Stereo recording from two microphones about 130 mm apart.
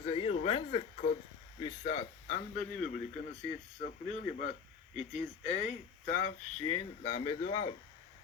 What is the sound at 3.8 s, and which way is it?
Speech, 60° left (ahead or behind).